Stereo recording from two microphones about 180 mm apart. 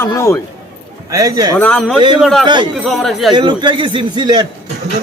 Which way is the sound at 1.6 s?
5° left (ahead or behind).